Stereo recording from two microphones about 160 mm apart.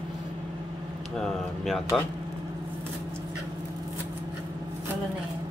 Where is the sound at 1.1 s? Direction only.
Centre (ahead or behind).